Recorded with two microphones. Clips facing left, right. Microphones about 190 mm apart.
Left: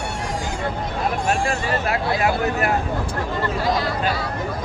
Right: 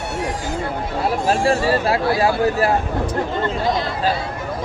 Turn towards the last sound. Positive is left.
turn(degrees=-25)  # may be behind; listen again after turning